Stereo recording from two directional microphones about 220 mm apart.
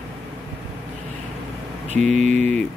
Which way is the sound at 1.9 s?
35° right (ahead or behind).